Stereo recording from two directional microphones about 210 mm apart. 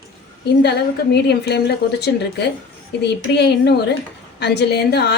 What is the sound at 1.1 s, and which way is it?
A woman's voice, 50° left (ahead or behind).